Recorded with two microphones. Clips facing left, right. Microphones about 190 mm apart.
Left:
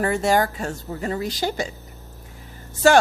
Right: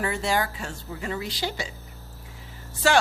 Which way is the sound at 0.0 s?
45° left (ahead or behind).